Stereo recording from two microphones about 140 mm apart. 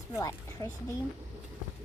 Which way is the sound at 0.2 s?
20° left (ahead or behind).